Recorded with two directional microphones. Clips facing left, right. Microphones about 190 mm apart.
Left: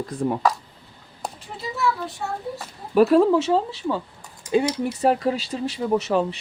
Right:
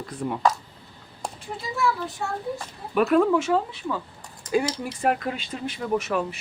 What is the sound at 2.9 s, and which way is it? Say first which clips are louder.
Speech: left 4 dB; 35° left (ahead or behind).